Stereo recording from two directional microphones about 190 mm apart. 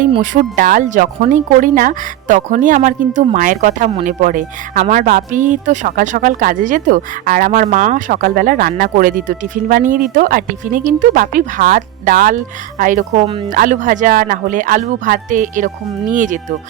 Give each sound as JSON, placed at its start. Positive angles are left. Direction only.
{"t": 0.2, "sound": "speech", "side_deg": -45}